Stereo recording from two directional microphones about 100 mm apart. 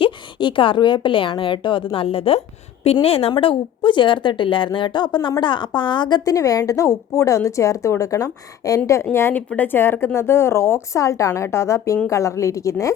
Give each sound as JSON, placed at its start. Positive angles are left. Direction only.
{"t": 0.0, "sound": "a woman's voice", "side_deg": 55}
{"t": 2.8, "sound": "speech", "side_deg": 80}
{"t": 3.3, "sound": "a woman's voice", "side_deg": 55}
{"t": 9.1, "sound": "a woman's voice", "side_deg": 25}